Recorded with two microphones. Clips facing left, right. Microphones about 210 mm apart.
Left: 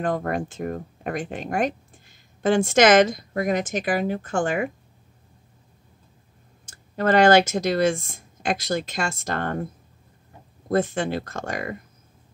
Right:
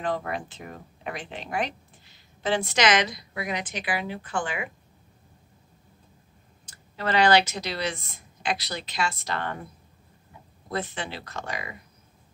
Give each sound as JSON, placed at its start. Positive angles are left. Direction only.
{"t": 0.0, "sound": "speech", "side_deg": 50}
{"t": 6.7, "sound": "speech", "side_deg": 50}
{"t": 10.7, "sound": "speech", "side_deg": 45}